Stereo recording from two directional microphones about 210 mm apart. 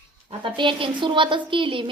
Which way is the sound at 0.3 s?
25° right (ahead or behind).